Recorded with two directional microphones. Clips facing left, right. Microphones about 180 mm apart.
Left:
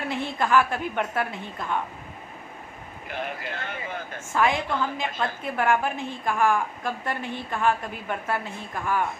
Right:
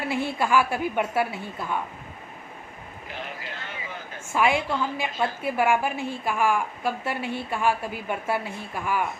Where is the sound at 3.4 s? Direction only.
55° left (ahead or behind).